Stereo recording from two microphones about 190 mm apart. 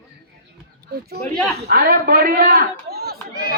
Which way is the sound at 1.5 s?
55° right (ahead or behind).